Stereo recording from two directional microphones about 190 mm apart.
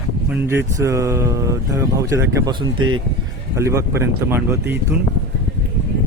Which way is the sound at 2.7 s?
90° right.